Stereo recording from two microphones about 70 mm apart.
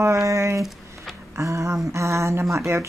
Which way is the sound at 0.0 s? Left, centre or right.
Right.